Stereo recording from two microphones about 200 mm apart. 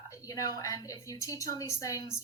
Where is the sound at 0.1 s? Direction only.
15° left (ahead or behind).